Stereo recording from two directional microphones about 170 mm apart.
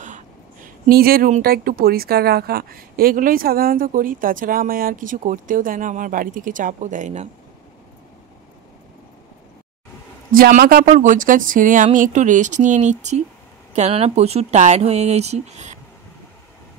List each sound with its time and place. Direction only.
0.0 s speech: 50° right (ahead or behind)
10.3 s speech: 60° right (ahead or behind); by 15.8 s 40° right (ahead or behind)